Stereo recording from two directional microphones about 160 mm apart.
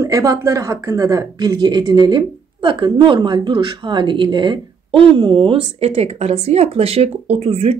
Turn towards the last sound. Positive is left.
turn(degrees=-40)  # may be behind; listen again after turning